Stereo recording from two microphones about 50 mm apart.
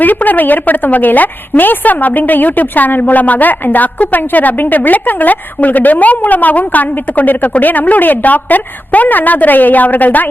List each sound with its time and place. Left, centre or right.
0.0 s a woman's voice: left